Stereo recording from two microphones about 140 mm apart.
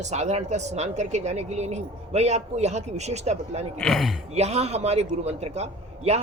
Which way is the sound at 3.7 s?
Centre (ahead or behind).